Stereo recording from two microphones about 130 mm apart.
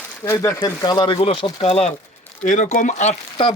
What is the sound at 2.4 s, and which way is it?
Speech, 75° left (ahead or behind).